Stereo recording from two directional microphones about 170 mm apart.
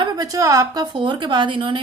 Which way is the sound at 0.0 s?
20° right (ahead or behind).